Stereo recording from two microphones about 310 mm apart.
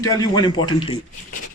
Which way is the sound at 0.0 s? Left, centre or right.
Centre.